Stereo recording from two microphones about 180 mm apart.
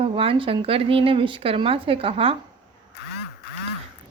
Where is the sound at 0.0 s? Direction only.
30° right (ahead or behind).